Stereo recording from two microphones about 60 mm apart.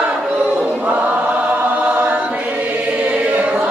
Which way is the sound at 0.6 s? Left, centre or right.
Right.